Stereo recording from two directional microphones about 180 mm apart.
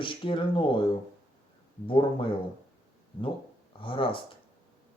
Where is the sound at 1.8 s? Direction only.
30° left (ahead or behind).